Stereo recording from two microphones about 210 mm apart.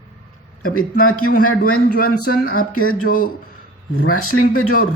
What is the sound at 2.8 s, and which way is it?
Speech, 90° left.